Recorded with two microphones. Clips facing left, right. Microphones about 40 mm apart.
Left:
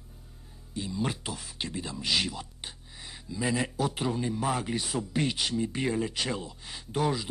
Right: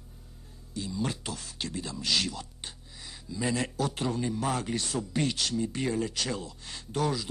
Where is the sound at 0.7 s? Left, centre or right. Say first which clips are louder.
Left 1 dB; left.